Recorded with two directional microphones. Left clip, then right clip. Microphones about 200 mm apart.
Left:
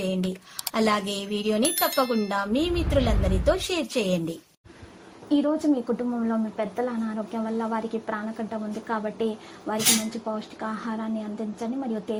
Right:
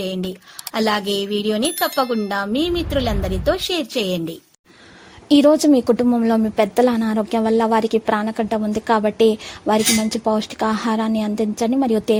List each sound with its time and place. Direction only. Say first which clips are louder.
0.7 s a woman's voice: right 5 dB; 25° right (ahead or behind)
2.0 s speech: right 4 dB; centre (ahead or behind)
2.3 s a woman's voice: right 5 dB; 30° right (ahead or behind)
5.3 s a woman's voice: right 11 dB; 50° right (ahead or behind)